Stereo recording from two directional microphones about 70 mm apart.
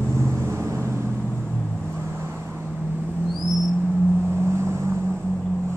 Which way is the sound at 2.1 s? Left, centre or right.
Right.